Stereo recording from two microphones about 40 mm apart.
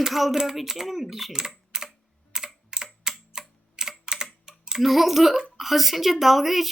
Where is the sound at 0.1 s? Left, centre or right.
Centre.